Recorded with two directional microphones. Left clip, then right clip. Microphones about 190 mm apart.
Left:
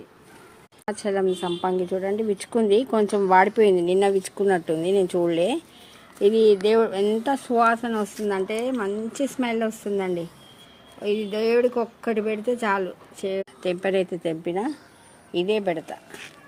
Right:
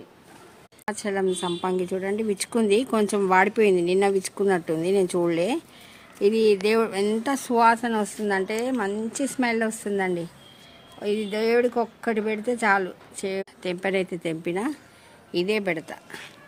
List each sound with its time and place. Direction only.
0.9 s a woman's voice: 20° right (ahead or behind)
15.3 s speech: 90° right
15.5 s a woman's voice: 25° right (ahead or behind)